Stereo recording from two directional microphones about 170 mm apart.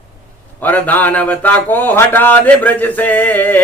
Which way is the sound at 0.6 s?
10° left (ahead or behind).